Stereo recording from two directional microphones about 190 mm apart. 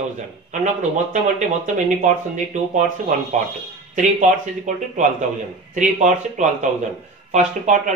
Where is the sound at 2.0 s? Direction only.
40° right (ahead or behind).